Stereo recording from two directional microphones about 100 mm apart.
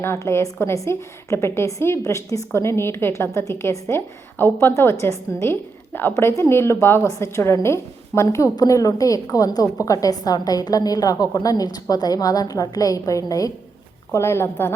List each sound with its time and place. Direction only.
0.0 s a woman's voice: 25° left (ahead or behind)
14.1 s a woman's voice: 25° left (ahead or behind)